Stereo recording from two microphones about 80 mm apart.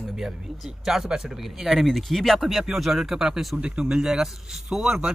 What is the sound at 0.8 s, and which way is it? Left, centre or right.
Speech, centre.